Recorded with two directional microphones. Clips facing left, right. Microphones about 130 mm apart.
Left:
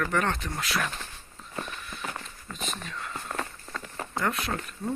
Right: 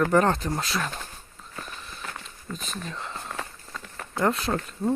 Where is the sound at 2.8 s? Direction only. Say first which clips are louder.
Right 3 dB; 30° right (ahead or behind).